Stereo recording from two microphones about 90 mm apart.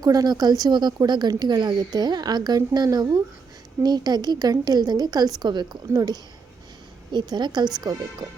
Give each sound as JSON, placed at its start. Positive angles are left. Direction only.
{"t": 0.0, "sound": "speech", "side_deg": -45}
{"t": 5.9, "sound": "speech", "side_deg": -45}
{"t": 7.1, "sound": "speech", "side_deg": -55}